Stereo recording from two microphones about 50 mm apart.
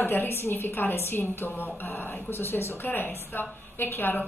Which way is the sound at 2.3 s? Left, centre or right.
Left.